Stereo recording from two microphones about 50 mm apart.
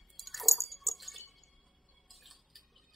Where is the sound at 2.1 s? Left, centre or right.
Centre.